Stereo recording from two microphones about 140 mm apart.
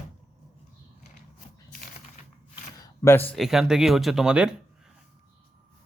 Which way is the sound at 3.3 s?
Centre (ahead or behind).